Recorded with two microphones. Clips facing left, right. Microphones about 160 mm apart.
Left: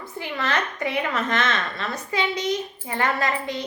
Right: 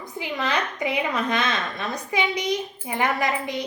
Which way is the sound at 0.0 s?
15° right (ahead or behind).